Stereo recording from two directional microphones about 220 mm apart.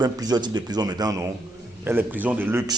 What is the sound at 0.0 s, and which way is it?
A man's voice, 20° right (ahead or behind).